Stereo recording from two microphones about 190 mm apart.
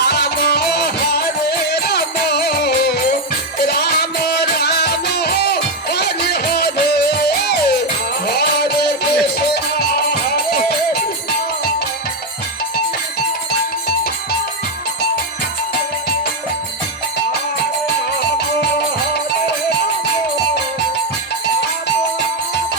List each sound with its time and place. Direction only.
0.0 s music: 60° left (ahead or behind)